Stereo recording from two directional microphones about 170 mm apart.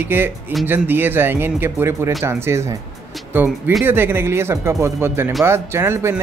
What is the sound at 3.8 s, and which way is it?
Speech, 15° right (ahead or behind).